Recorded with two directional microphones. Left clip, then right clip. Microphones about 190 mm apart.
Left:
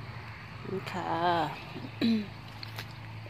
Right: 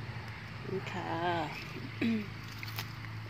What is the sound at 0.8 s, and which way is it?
Speech, 25° left (ahead or behind).